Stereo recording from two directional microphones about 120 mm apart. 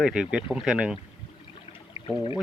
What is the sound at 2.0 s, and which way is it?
Speech, 50° left (ahead or behind).